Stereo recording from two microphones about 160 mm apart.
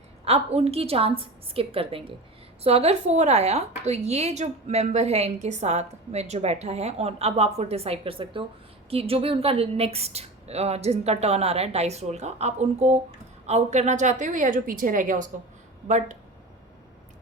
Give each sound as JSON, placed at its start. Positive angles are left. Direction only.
{"t": 0.3, "sound": "a woman's voice", "side_deg": -40}